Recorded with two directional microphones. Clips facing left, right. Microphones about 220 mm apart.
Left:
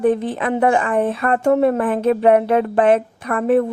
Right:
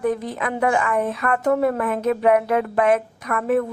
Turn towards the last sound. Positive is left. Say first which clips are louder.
# left 4 dB
turn(degrees=30)  # may be behind; listen again after turning